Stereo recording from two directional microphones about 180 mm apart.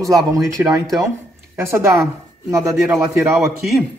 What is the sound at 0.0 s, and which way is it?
A man's voice, 20° right (ahead or behind).